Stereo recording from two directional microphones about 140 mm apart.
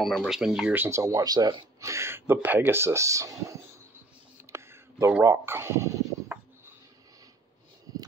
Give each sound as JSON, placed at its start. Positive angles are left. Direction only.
{"t": 0.0, "sound": "speech", "side_deg": 5}
{"t": 0.7, "sound": "speech", "side_deg": -20}
{"t": 4.5, "sound": "a sound", "side_deg": -20}
{"t": 5.2, "sound": "speech", "side_deg": -15}